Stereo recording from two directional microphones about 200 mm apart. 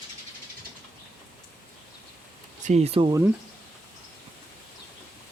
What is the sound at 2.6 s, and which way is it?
Speech, 35° right (ahead or behind).